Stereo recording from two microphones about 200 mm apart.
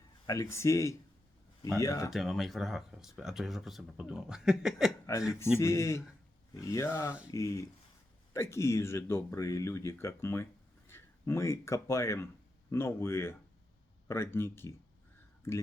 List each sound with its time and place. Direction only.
0.3 s speech: 15° left (ahead or behind)
2.1 s speech: centre (ahead or behind)
5.1 s speech: 15° left (ahead or behind)